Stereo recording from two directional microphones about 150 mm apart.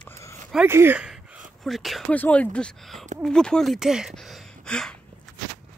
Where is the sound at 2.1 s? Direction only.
10° left (ahead or behind).